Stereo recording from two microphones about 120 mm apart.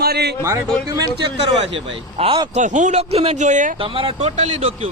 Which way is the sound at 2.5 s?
90° right.